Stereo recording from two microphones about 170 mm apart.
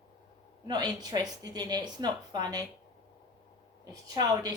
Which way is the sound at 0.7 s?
25° right (ahead or behind).